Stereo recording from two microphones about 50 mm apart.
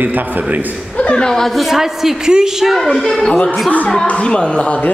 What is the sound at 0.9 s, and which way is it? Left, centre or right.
Chuckle, left.